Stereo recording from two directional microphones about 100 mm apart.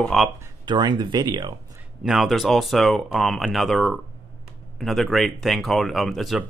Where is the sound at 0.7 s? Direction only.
50° right (ahead or behind).